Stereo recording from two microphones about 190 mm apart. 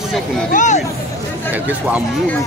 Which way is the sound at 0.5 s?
40° left (ahead or behind).